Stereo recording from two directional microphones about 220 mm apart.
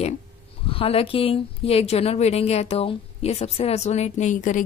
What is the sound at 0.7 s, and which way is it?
A woman's voice, 25° left (ahead or behind).